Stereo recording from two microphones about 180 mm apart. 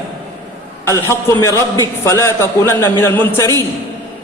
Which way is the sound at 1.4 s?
15° left (ahead or behind).